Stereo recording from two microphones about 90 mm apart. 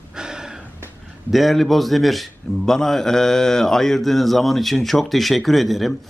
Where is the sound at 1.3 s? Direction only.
Centre (ahead or behind).